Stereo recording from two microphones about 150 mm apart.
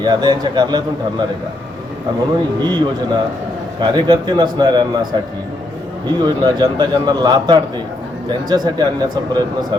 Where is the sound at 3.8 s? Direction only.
30° right (ahead or behind).